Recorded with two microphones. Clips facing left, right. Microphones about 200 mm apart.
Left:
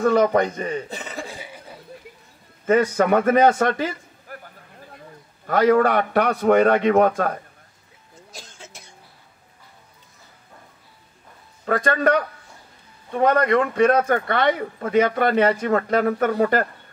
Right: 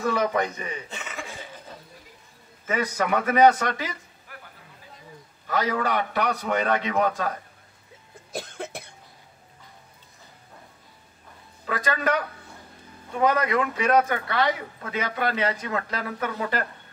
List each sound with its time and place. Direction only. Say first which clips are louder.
0.0 s a man's voice: left 7 dB; 50° left (ahead or behind)
0.8 s chuckle: left 5 dB; 35° left (ahead or behind)
1.4 s a sound: left 2 dB; 10° left (ahead or behind)
2.6 s a man's voice: left 8 dB; 55° left (ahead or behind)
5.5 s a man's voice: left 9 dB; 50° left (ahead or behind)
8.3 s cough: right 11 dB; 60° right (ahead or behind)
11.6 s a man's voice: left 7 dB; 50° left (ahead or behind)
13.3 s a man's voice: left 5 dB; 50° left (ahead or behind)